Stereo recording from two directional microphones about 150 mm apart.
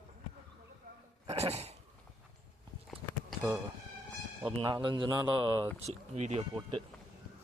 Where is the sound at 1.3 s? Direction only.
45° right (ahead or behind).